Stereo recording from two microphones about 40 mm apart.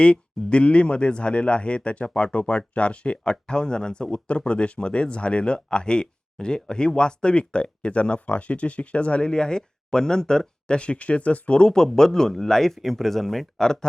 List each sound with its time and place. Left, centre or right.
0.0 s speech: left; by 13.5 s centre